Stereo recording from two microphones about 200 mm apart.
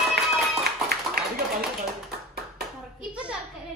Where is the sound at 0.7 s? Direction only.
50° right (ahead or behind).